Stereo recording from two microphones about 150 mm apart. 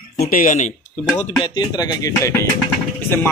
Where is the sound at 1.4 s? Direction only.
25° left (ahead or behind).